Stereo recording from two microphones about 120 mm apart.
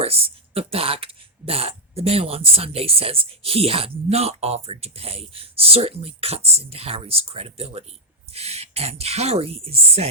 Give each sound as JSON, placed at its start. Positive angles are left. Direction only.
{"t": 0.0, "sound": "speech", "side_deg": -55}